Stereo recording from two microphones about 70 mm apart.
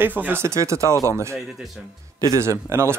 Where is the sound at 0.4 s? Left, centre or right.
Right.